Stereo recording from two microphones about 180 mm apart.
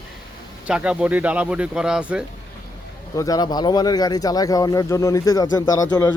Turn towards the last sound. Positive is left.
turn(degrees=15)  # may be behind; listen again after turning